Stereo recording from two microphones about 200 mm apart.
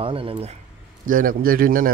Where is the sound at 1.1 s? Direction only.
45° right (ahead or behind).